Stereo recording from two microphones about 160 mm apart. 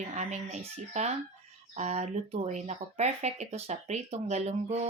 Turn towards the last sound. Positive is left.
turn(degrees=-45)  # may be behind; listen again after turning